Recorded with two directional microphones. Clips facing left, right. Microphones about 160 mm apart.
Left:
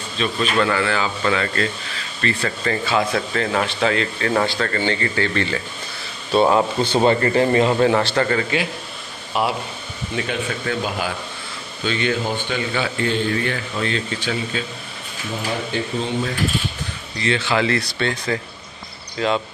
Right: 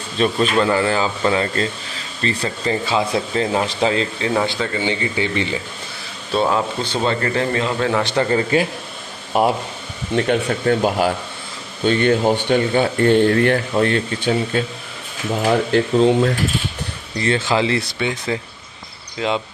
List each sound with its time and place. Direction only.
0.2 s speech: 45° right (ahead or behind)
0.6 s speech: 30° right (ahead or behind)
2.4 s speech: 20° right (ahead or behind)
3.8 s speech: 25° right (ahead or behind)
4.5 s speech: 15° right (ahead or behind)
6.3 s speech: 5° left (ahead or behind)
8.0 s speech: 15° right (ahead or behind)
8.4 s a man's voice: 35° right (ahead or behind)
15.4 s speech: 90° right
17.2 s speech: 45° right (ahead or behind)
17.6 s speech: 25° right (ahead or behind)
17.9 s speech: 5° right (ahead or behind)